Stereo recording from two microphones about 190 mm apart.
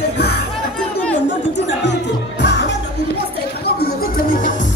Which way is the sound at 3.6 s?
50° left (ahead or behind).